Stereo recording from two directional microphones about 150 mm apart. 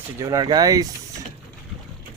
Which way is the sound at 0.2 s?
25° right (ahead or behind).